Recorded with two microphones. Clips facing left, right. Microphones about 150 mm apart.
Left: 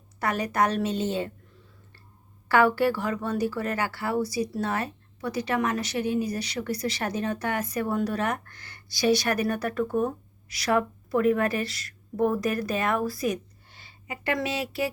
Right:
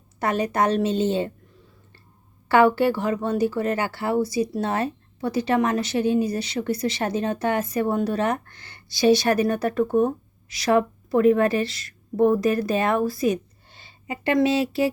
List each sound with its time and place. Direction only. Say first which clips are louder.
0.2 s speech: right 3 dB; 25° right (ahead or behind)
2.5 s a woman's voice: right 4 dB; 25° right (ahead or behind)